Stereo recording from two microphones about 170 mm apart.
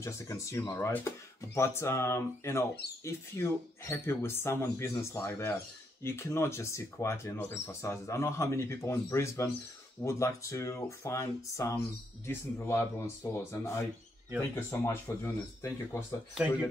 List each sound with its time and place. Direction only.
0.0 s speech: 15° left (ahead or behind)